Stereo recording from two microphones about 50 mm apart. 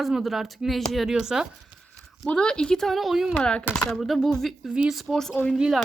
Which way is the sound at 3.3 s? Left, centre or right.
Centre.